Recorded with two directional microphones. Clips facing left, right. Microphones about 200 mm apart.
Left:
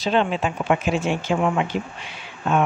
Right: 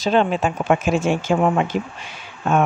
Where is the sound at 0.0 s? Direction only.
45° right (ahead or behind).